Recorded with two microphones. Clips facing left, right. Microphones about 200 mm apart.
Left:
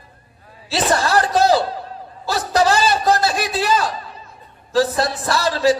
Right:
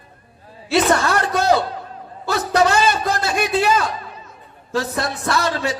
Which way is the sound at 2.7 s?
35° left (ahead or behind).